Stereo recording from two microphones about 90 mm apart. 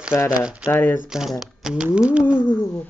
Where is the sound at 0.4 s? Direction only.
10° right (ahead or behind).